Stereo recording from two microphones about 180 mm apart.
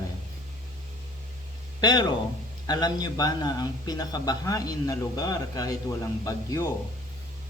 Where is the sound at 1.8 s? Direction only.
25° left (ahead or behind).